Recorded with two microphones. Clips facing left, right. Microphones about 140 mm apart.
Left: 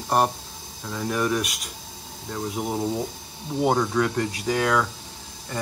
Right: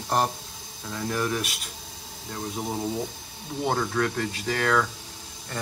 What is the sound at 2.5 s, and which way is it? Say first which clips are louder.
Speech: left 3 dB; 15° left (ahead or behind).